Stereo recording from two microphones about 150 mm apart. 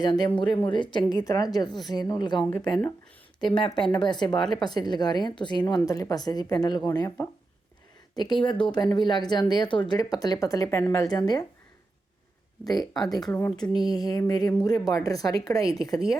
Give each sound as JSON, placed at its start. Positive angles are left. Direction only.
{"t": 0.0, "sound": "a woman's voice", "side_deg": 30}
{"t": 12.8, "sound": "a woman's voice", "side_deg": 0}
{"t": 13.8, "sound": "speech", "side_deg": 25}